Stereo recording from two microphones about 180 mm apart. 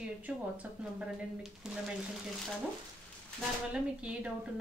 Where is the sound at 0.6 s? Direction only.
5° right (ahead or behind).